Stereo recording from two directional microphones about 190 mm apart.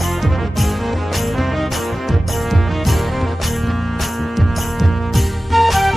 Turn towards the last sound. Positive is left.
turn(degrees=0)  # may be behind; listen again after turning